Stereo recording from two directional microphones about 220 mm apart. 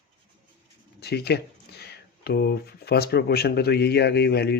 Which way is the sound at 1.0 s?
45° left (ahead or behind).